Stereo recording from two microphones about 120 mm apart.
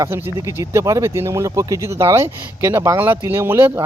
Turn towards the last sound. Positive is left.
turn(degrees=-20)  # may be behind; listen again after turning